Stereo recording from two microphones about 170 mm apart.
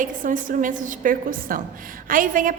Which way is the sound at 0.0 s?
50° right (ahead or behind).